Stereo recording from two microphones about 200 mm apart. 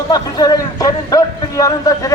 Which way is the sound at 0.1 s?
20° left (ahead or behind).